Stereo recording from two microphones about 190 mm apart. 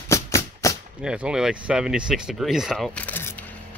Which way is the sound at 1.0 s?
5° right (ahead or behind).